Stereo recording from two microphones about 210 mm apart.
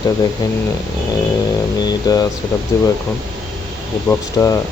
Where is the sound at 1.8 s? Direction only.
20° left (ahead or behind).